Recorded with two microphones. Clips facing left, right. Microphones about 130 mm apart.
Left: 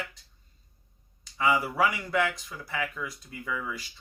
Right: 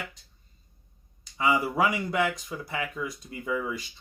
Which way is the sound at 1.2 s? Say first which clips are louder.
Right 1 dB; 20° right (ahead or behind).